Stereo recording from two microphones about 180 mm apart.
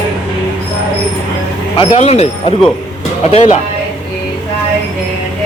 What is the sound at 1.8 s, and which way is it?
A man's voice, 35° left (ahead or behind).